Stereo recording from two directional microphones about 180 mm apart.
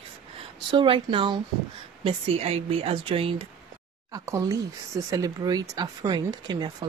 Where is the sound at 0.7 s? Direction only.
25° right (ahead or behind).